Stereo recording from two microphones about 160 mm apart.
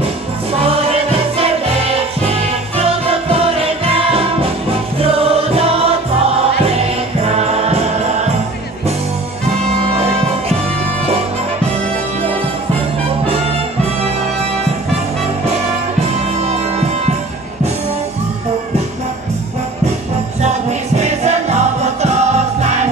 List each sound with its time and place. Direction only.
0.6 s music: 35° right (ahead or behind)
3.8 s music: 35° right (ahead or behind)
7.2 s music: 40° right (ahead or behind)
21.0 s music: 45° right (ahead or behind)